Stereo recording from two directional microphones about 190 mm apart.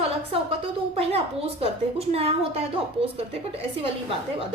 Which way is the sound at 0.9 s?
30° right (ahead or behind).